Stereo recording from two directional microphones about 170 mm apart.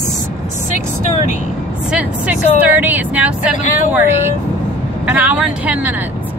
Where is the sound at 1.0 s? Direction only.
45° left (ahead or behind).